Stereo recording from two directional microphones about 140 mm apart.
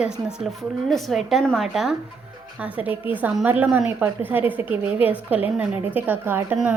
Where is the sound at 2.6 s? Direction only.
10° right (ahead or behind).